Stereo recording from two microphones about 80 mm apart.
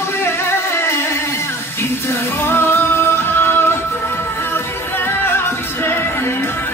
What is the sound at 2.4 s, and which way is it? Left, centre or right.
Music, left.